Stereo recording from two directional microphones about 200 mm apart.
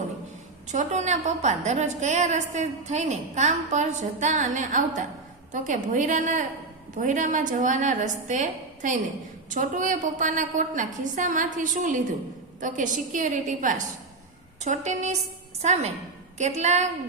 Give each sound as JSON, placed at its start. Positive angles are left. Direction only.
{"t": 0.7, "sound": "a woman's voice", "side_deg": -35}